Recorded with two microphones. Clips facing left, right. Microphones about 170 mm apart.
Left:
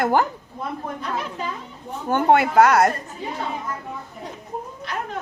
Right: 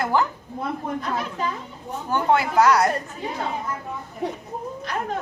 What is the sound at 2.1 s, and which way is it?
Speech, 55° left (ahead or behind).